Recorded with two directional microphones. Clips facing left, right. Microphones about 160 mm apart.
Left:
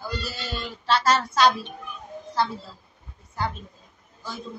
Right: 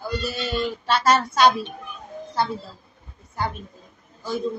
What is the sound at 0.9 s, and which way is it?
Speech, 15° right (ahead or behind).